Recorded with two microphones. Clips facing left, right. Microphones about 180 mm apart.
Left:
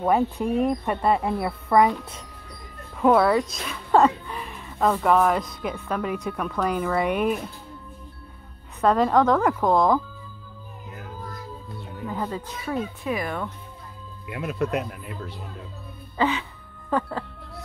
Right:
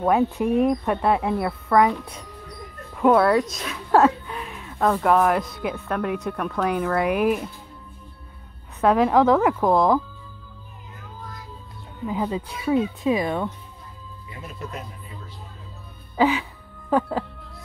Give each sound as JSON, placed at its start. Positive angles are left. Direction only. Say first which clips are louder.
{"t": 0.0, "sound": "speech", "louder": "right 2 dB", "side_deg": 0}
{"t": 3.0, "sound": "speech", "louder": "right 1 dB", "side_deg": 0}
{"t": 8.8, "sound": "speech", "louder": "right 2 dB", "side_deg": -5}
{"t": 12.1, "sound": "speech", "louder": "right 4 dB", "side_deg": -10}
{"t": 14.2, "sound": "speech", "louder": "left 10 dB", "side_deg": 75}
{"t": 16.2, "sound": "music", "louder": "right 4 dB", "side_deg": -15}